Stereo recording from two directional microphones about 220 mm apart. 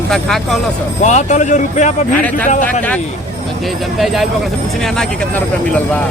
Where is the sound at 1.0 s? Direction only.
35° left (ahead or behind).